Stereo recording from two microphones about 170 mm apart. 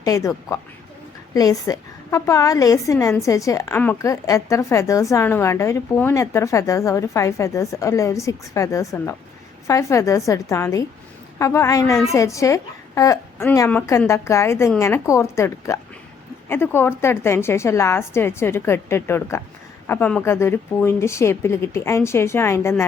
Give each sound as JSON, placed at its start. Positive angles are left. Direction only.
{"t": 0.0, "sound": "a woman's voice", "side_deg": 20}